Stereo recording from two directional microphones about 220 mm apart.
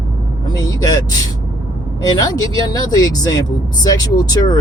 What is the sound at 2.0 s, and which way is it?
Speech, 15° left (ahead or behind).